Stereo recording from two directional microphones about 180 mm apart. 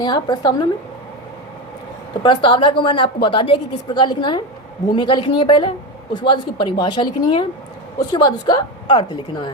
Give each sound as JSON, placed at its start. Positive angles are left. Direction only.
{"t": 0.0, "sound": "a woman's voice", "side_deg": 25}
{"t": 2.2, "sound": "a woman's voice", "side_deg": 25}